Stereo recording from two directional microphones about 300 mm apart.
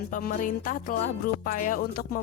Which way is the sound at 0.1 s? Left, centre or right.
Left.